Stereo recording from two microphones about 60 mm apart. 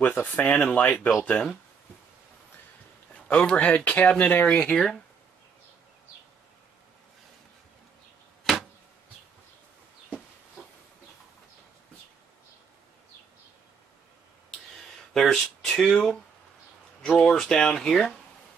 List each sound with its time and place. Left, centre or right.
0.2 s speech: left
3.2 s speech: centre
4.6 s speech: centre
15.1 s speech: centre